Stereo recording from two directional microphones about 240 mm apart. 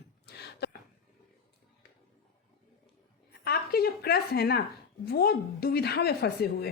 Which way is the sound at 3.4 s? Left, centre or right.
Left.